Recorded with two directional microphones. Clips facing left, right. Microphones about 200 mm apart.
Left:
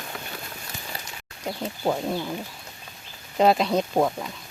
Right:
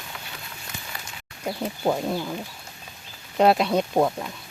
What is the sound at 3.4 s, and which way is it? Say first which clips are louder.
Speech: right 1 dB; 5° right (ahead or behind).